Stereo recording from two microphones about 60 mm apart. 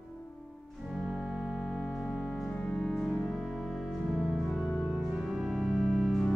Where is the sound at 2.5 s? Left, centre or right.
Centre.